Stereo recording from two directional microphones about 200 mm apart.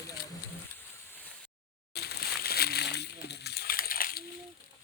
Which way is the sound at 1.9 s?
55° left (ahead or behind).